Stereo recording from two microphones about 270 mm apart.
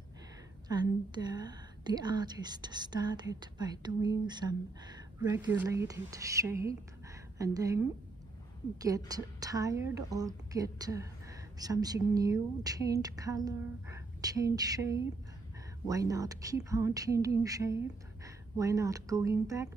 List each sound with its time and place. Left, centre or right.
0.7 s a woman's voice: centre